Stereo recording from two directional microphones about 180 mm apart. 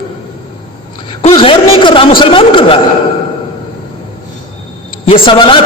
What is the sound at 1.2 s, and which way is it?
A man's voice, 30° left (ahead or behind).